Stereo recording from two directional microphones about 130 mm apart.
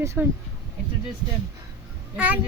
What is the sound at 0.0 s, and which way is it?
Speech, 20° right (ahead or behind).